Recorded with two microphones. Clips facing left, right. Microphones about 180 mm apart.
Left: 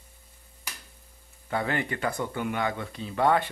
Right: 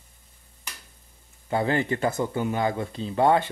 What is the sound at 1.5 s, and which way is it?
Speech, 30° right (ahead or behind).